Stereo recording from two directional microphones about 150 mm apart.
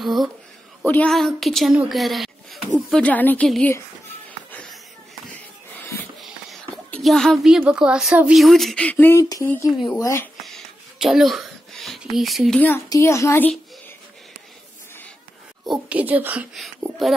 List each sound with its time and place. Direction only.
0.0 s a woman's voice: centre (ahead or behind)
4.5 s a sound: 10° left (ahead or behind)
5.3 s music: 10° left (ahead or behind)
6.7 s a woman's voice: 5° left (ahead or behind); by 9.5 s 25° left (ahead or behind)
9.7 s a woman's voice: centre (ahead or behind)
9.9 s speech: 20° left (ahead or behind)
10.4 s a sound: centre (ahead or behind)
12.5 s a woman's voice: 15° left (ahead or behind)
15.6 s speech: 5° right (ahead or behind)
16.5 s speech: centre (ahead or behind)